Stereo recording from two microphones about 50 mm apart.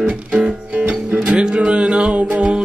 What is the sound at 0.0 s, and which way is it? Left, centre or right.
Music, right.